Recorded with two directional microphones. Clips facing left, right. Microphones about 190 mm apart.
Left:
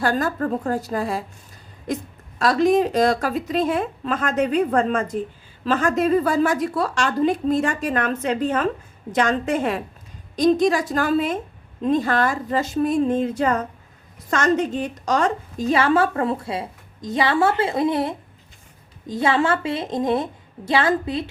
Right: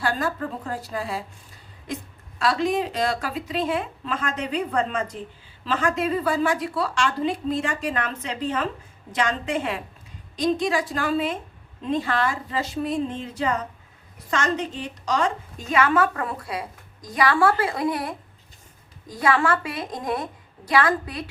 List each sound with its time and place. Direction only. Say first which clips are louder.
0.0 s a woman's voice: left 4 dB; 45° left (ahead or behind)
2.4 s a woman's voice: left 6 dB; 45° left (ahead or behind); by 21.2 s 25° left (ahead or behind)